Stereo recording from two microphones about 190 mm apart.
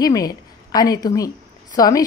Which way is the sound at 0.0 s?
20° left (ahead or behind).